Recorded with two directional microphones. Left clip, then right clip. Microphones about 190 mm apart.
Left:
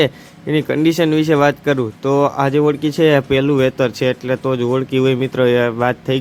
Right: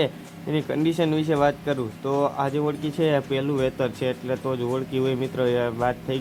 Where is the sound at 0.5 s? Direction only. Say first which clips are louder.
Left 9 dB; 30° left (ahead or behind).